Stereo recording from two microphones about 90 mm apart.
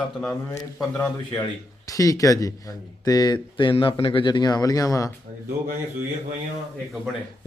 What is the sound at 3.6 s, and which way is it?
A man's voice, 70° left (ahead or behind).